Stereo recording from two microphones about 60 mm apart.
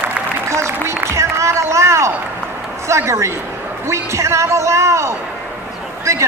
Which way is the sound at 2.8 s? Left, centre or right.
Right.